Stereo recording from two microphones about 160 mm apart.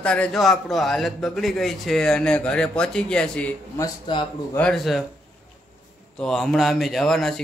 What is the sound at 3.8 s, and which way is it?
Speech, 30° left (ahead or behind).